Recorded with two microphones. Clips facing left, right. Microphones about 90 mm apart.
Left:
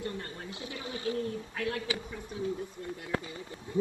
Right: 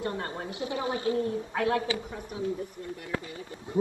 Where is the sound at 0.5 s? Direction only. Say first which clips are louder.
Right 8 dB; 20° right (ahead or behind).